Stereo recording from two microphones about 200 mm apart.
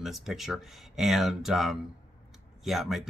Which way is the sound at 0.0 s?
Centre (ahead or behind).